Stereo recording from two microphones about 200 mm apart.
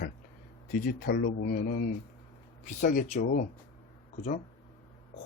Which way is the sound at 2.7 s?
40° left (ahead or behind).